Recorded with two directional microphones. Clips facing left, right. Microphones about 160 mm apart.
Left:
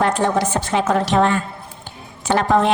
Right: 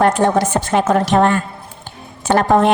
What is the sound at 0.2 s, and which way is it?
A woman's voice, 50° right (ahead or behind).